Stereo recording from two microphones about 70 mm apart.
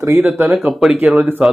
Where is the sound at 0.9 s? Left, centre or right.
Right.